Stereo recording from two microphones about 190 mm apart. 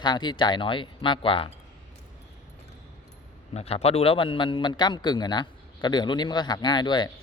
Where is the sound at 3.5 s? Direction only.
35° left (ahead or behind).